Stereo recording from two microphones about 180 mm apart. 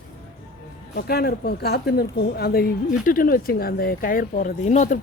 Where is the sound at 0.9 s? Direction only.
65° left (ahead or behind); by 4.9 s 40° left (ahead or behind).